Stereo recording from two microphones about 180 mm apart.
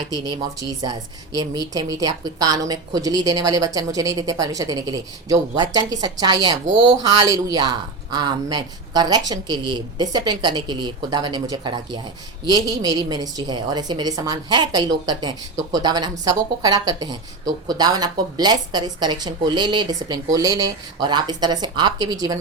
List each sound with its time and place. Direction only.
0.3 s a woman's voice: 25° right (ahead or behind)